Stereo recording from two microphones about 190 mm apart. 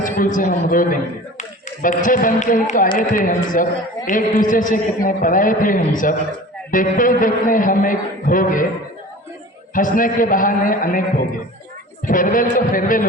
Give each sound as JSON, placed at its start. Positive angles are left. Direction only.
{"t": 0.0, "sound": "speech", "side_deg": 45}
{"t": 9.7, "sound": "speech", "side_deg": 45}